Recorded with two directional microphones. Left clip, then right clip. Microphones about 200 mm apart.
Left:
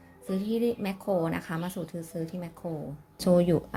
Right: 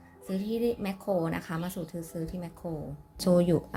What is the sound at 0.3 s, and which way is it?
Speech, 5° left (ahead or behind).